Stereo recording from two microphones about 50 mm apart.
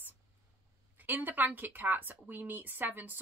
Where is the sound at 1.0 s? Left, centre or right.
Right.